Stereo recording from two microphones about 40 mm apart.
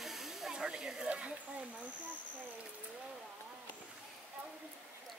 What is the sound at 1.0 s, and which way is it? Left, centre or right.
Speech, right.